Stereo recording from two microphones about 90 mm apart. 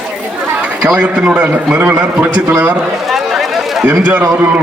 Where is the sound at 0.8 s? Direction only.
15° right (ahead or behind).